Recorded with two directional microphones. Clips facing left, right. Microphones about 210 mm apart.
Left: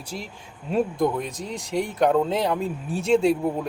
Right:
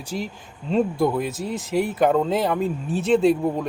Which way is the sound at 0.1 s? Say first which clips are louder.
Right 7 dB; centre (ahead or behind).